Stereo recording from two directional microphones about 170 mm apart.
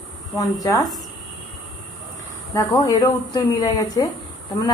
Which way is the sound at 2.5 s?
20° left (ahead or behind).